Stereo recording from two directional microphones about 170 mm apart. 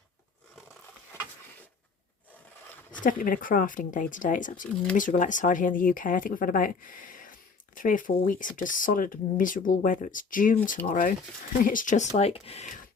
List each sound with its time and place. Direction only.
3.0 s speech: 50° left (ahead or behind)